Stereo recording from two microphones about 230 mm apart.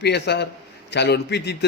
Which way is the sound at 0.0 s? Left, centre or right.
Left.